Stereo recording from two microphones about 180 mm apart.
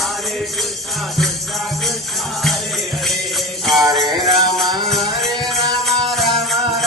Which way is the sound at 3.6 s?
Centre (ahead or behind).